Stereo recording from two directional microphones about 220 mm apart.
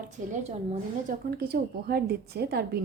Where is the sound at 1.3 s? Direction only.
45° right (ahead or behind).